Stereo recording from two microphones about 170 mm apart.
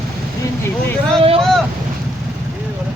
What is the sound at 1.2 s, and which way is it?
Speech, 35° right (ahead or behind).